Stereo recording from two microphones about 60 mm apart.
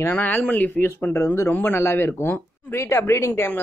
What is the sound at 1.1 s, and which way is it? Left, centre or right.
Speech, left.